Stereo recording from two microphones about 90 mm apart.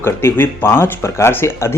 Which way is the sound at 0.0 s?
25° left (ahead or behind).